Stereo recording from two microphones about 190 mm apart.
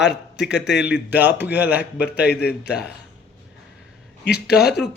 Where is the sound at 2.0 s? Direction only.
60° left (ahead or behind).